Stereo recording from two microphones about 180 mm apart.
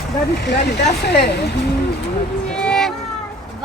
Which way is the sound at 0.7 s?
65° left (ahead or behind).